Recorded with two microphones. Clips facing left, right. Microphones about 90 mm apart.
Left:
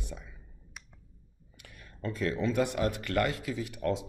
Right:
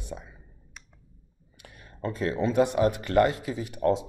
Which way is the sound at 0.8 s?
5° left (ahead or behind).